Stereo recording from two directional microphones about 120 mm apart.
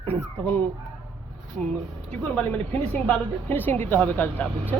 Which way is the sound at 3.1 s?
15° left (ahead or behind).